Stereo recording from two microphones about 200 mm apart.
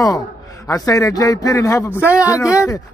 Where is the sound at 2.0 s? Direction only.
5° right (ahead or behind).